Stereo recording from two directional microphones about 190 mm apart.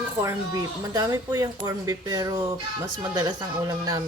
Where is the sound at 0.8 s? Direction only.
20° right (ahead or behind).